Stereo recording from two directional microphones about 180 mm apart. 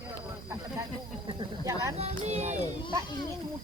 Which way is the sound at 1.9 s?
35° right (ahead or behind).